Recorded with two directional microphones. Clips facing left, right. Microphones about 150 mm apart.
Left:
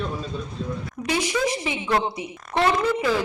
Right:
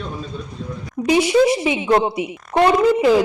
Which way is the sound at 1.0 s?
20° right (ahead or behind).